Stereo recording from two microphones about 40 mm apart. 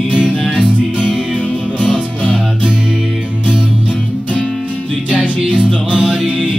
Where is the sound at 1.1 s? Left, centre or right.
Centre.